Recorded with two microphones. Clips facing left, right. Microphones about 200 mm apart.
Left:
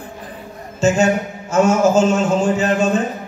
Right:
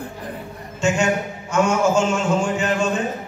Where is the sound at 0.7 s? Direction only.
40° left (ahead or behind).